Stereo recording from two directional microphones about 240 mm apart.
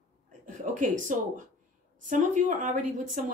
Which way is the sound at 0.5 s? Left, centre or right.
Right.